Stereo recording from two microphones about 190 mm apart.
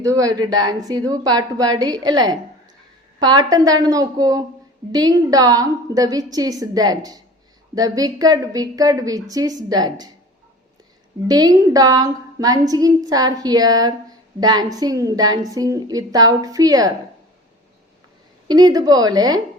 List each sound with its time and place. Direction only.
0.0 s a woman's voice: 20° right (ahead or behind)
11.3 s a woman's voice: 20° right (ahead or behind)
18.4 s a woman's voice: 20° right (ahead or behind)